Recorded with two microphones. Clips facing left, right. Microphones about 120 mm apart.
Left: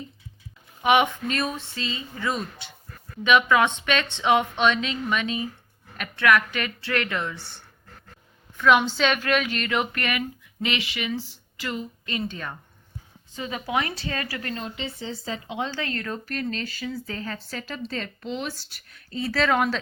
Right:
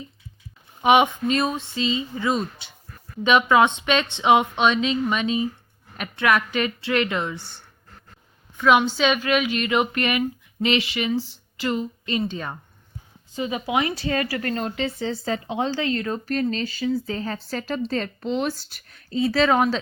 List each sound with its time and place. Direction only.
0.8 s speech: 20° right (ahead or behind)
8.5 s a woman's voice: 15° right (ahead or behind)
8.8 s speech: 5° right (ahead or behind)
14.0 s a woman's voice: 35° right (ahead or behind)
14.3 s speech: 45° right (ahead or behind)
15.4 s a woman's voice: 35° right (ahead or behind)
15.9 s a woman's voice: 20° right (ahead or behind); by 19.0 s 40° right (ahead or behind)
19.1 s speech: 20° right (ahead or behind)